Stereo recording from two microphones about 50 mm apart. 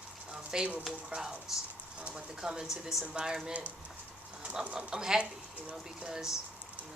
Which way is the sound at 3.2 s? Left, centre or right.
Right.